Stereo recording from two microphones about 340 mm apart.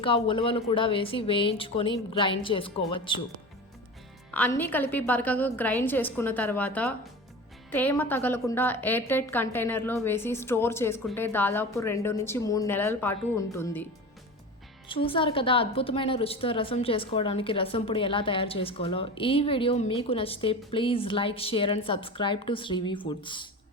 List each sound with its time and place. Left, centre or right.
0.0 s speech: centre
4.3 s a woman's voice: centre
14.8 s speech: centre